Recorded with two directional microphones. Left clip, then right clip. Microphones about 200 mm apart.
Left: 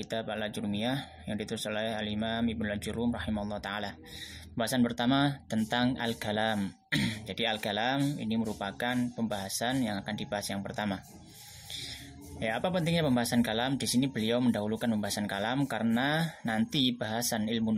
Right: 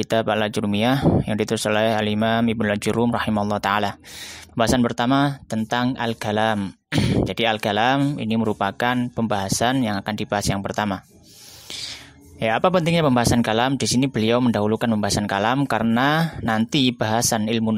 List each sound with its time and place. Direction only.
0.1 s speech: 50° right (ahead or behind)
12.4 s speech: 45° right (ahead or behind)